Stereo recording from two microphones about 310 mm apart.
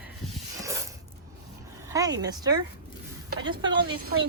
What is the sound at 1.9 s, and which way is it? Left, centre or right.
Speech, centre.